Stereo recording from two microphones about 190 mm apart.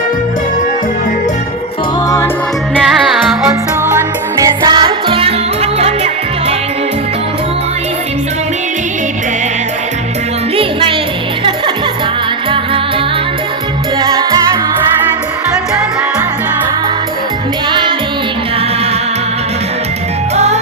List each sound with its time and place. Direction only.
2.7 s music: 5° right (ahead or behind)
3.9 s music: 20° right (ahead or behind)
10.6 s music: 25° right (ahead or behind)
14.0 s music: 20° right (ahead or behind)
17.7 s music: 25° right (ahead or behind)
20.3 s music: 35° right (ahead or behind)